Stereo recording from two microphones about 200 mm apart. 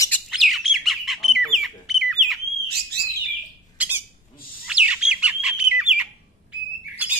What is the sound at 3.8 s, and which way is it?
Squawk, 10° right (ahead or behind).